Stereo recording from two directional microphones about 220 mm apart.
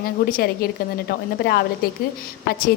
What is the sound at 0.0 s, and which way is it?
A woman's voice, 40° left (ahead or behind).